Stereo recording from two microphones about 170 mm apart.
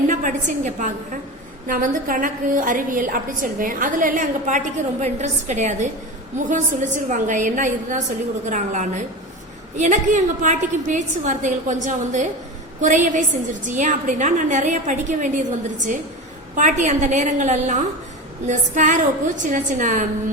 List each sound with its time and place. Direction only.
0.1 s a woman's voice: 45° right (ahead or behind)